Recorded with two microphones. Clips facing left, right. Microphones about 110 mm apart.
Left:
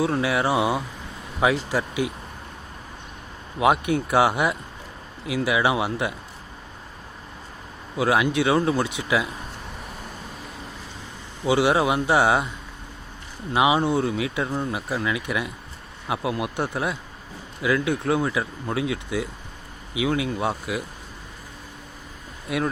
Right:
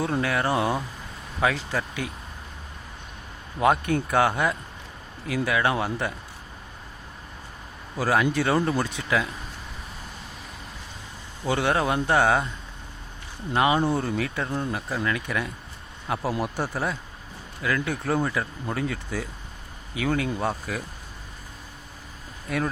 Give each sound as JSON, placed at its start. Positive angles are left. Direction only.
{"t": 0.0, "sound": "speech", "side_deg": 5}
{"t": 3.6, "sound": "speech", "side_deg": 10}
{"t": 7.9, "sound": "speech", "side_deg": 5}
{"t": 11.4, "sound": "speech", "side_deg": 10}
{"t": 13.5, "sound": "speech", "side_deg": 10}
{"t": 22.4, "sound": "speech", "side_deg": 5}